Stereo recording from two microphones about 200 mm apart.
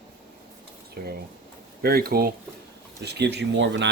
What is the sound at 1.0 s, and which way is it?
Speech, 50° right (ahead or behind).